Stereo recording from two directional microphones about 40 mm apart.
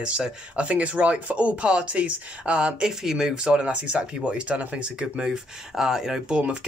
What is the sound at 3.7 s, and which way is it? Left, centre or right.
Speech, right.